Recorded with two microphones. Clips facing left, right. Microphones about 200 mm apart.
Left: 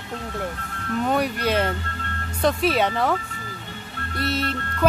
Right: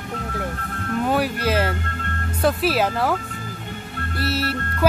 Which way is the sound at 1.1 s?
5° right (ahead or behind).